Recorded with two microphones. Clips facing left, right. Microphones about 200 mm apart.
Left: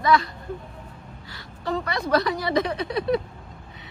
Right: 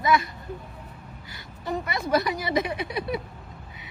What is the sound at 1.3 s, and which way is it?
A woman's voice, 20° right (ahead or behind).